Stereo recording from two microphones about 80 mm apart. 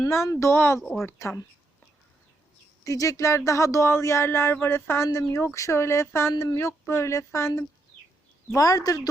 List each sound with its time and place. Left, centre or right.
0.1 s speech: left
2.8 s speech: left
8.5 s a woman's voice: left